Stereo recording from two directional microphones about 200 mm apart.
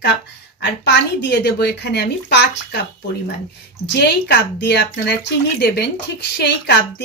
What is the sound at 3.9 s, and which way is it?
Speech, 55° left (ahead or behind).